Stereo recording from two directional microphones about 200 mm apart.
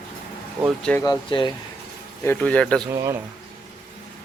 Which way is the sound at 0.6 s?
5° left (ahead or behind).